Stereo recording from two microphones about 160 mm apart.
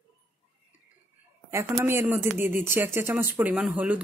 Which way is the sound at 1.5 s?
15° right (ahead or behind).